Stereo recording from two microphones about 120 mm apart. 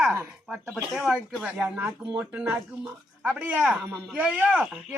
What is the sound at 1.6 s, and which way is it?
Speech, 20° right (ahead or behind).